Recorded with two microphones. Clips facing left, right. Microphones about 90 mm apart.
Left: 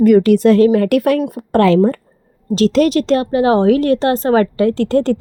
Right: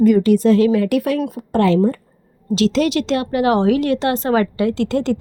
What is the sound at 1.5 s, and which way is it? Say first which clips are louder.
Speech: left 4 dB; 90° left.